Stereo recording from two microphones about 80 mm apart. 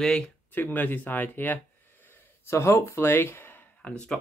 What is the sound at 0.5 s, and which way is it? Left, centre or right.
Speech, left.